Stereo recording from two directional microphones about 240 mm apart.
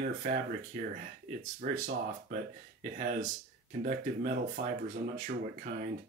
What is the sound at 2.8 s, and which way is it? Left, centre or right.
Speech, right.